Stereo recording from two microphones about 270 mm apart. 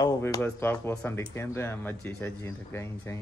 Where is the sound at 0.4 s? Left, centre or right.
Centre.